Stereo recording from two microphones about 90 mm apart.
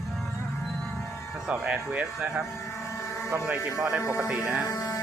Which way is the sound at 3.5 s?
15° right (ahead or behind).